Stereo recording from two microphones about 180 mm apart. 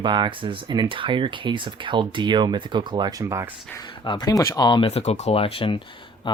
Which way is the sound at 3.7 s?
25° left (ahead or behind).